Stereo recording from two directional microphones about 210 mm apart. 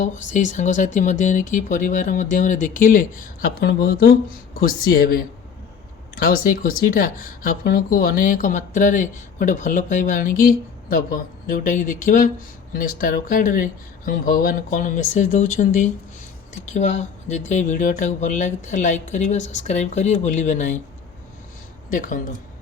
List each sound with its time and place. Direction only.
0.0 s a woman's voice: 35° left (ahead or behind)
21.8 s speech: 40° left (ahead or behind)